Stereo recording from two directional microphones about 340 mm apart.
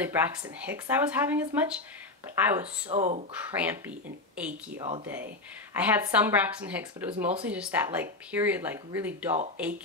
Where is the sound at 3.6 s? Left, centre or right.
Centre.